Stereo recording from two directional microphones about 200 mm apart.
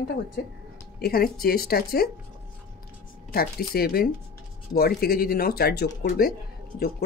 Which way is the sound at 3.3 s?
50° left (ahead or behind).